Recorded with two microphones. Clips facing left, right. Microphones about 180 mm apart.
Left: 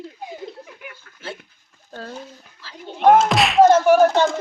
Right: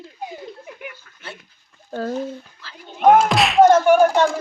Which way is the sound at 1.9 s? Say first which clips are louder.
Right 9 dB; 45° right (ahead or behind).